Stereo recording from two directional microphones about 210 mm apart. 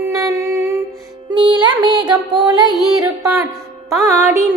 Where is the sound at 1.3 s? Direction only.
20° right (ahead or behind).